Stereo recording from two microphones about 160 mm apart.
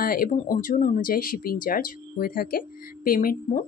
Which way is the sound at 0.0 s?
65° left (ahead or behind).